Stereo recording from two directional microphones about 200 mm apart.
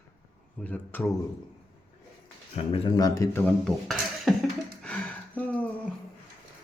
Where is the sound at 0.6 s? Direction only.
10° left (ahead or behind).